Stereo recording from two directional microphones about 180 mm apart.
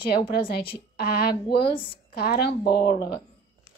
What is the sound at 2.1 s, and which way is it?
A woman's voice, 60° left (ahead or behind).